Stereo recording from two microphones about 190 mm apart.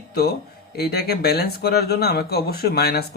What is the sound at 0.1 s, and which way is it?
A man's voice, 55° left (ahead or behind).